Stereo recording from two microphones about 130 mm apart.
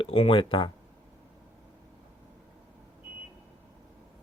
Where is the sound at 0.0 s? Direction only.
45° left (ahead or behind).